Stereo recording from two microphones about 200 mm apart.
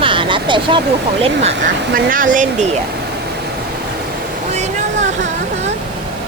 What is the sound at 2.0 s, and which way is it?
Speech, 45° right (ahead or behind).